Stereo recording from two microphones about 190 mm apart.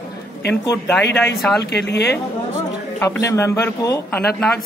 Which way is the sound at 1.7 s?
60° left (ahead or behind).